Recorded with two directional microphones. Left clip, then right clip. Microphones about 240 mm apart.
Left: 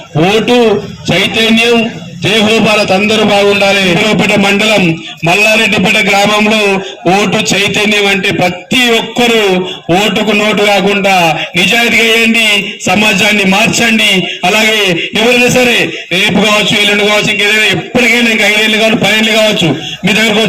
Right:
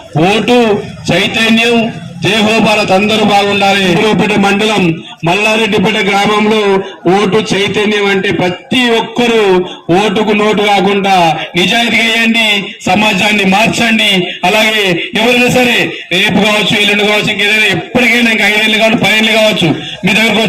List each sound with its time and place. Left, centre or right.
0.2 s a man's voice: centre
4.0 s a man's voice: left; by 20.5 s centre